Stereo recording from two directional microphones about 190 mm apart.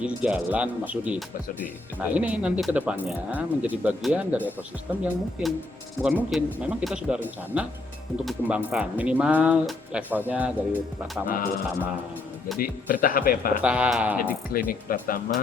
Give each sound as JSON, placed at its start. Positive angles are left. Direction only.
{"t": 0.0, "sound": "speech", "side_deg": -5}
{"t": 11.3, "sound": "speech", "side_deg": 50}
{"t": 12.5, "sound": "speech", "side_deg": 50}
{"t": 13.6, "sound": "speech", "side_deg": -5}
{"t": 14.2, "sound": "speech", "side_deg": 50}